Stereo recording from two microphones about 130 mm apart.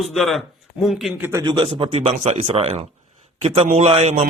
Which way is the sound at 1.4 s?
35° right (ahead or behind).